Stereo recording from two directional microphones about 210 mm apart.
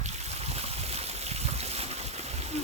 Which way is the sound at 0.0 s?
30° right (ahead or behind).